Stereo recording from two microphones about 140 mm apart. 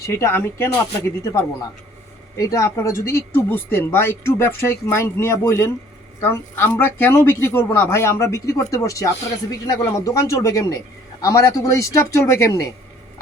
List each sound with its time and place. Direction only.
0.0 s speech: 20° left (ahead or behind)
2.4 s speech: 25° left (ahead or behind)